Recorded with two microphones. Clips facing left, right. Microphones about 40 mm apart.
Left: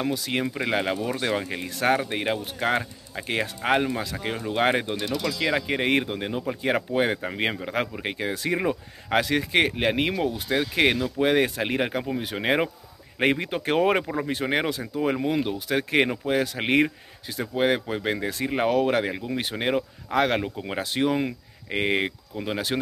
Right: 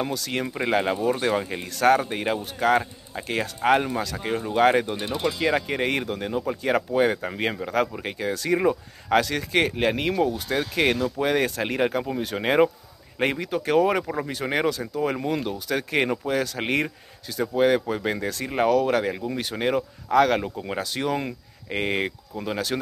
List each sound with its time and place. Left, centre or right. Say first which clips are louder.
0.0 s speech: left 1 dB; centre
2.0 s speech: even; left
4.9 s speech: right 1 dB; right
5.4 s speech: even; centre
8.5 s speech: right 3 dB; centre
13.4 s speech: right 2 dB; left
14.4 s speech: right 3 dB; centre
21.1 s speech: left 2 dB; centre